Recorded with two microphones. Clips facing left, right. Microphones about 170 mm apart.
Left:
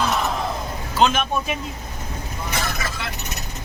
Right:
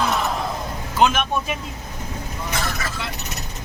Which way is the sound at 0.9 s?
10° right (ahead or behind).